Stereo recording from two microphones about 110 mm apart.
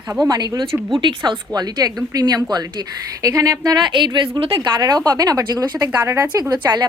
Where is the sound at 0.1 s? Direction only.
40° right (ahead or behind).